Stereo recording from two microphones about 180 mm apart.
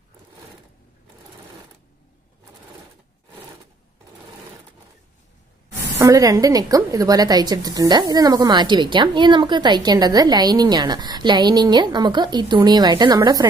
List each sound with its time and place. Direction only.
5.9 s a woman's voice: 20° right (ahead or behind)